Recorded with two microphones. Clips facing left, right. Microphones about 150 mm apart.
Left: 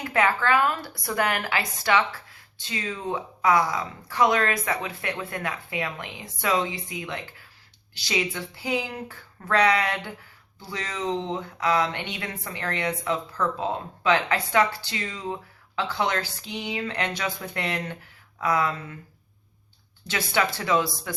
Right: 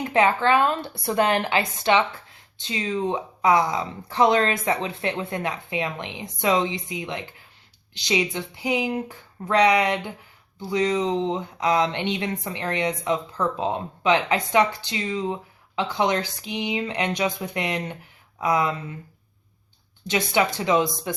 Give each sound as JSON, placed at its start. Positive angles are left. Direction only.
{"t": 0.0, "sound": "speech", "side_deg": -20}
{"t": 20.1, "sound": "speech", "side_deg": -20}